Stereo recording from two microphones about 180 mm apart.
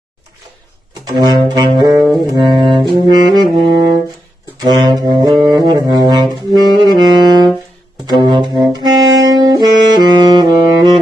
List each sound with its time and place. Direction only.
1.0 s music: 25° right (ahead or behind)
2.6 s brass instrument: 25° right (ahead or behind)
4.6 s music: 20° right (ahead or behind)
6.8 s saxophone: 20° right (ahead or behind)